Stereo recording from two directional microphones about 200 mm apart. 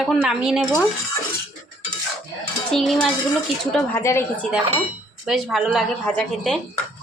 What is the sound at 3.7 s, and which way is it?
Speech, 10° left (ahead or behind).